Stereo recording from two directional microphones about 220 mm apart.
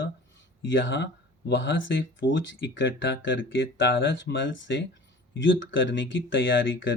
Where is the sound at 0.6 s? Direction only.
55° left (ahead or behind).